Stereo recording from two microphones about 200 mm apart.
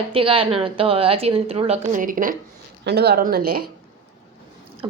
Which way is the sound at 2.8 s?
55° right (ahead or behind).